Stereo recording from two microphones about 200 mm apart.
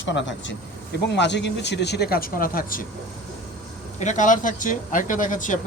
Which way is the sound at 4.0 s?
40° left (ahead or behind).